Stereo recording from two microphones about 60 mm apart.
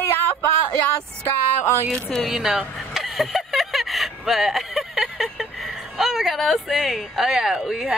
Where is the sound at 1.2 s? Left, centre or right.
Left.